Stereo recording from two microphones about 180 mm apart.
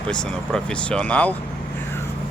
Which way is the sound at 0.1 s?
5° left (ahead or behind).